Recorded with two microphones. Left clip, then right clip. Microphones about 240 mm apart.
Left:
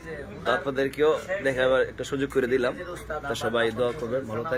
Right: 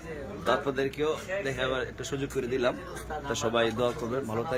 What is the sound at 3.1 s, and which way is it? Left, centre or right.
Speech, centre.